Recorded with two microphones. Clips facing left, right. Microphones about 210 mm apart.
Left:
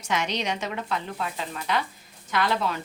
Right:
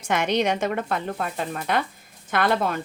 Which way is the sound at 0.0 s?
55° right (ahead or behind).